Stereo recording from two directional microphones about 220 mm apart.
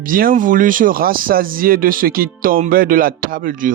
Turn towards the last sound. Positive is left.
turn(degrees=-40)  # may be behind; listen again after turning